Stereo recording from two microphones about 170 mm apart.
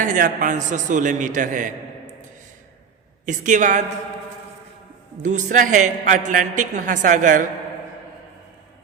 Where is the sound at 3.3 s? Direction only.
50° right (ahead or behind).